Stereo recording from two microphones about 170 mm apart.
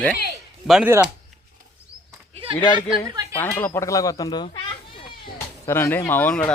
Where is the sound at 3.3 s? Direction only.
10° left (ahead or behind).